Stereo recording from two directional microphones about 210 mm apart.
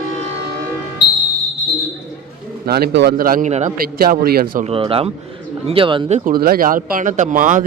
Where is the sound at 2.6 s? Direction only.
50° right (ahead or behind).